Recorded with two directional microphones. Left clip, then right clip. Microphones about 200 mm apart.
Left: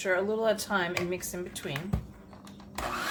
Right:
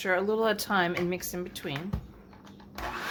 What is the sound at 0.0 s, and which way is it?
A woman's voice, 45° right (ahead or behind).